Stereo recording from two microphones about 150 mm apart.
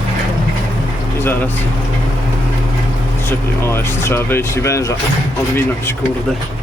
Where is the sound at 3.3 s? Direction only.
15° left (ahead or behind).